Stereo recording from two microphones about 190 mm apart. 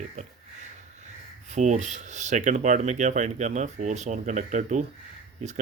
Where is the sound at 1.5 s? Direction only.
40° right (ahead or behind).